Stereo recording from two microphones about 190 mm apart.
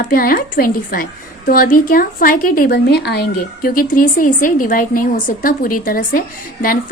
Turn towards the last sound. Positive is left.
turn(degrees=50)  # may be behind; listen again after turning